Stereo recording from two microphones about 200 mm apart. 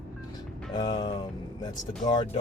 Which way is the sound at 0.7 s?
20° left (ahead or behind).